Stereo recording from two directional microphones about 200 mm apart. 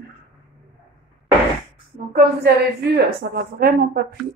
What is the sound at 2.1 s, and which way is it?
A woman's voice, 55° right (ahead or behind).